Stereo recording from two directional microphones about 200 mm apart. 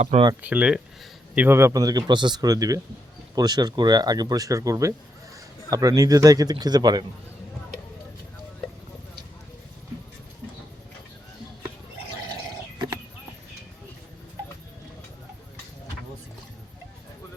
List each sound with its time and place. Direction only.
0.0 s speech: 35° right (ahead or behind)
0.4 s speech: 5° right (ahead or behind)